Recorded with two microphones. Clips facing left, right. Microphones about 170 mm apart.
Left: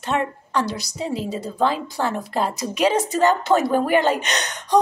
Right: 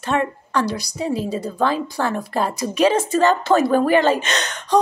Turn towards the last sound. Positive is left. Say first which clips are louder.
# right 2 dB
turn(degrees=20)  # may be behind; listen again after turning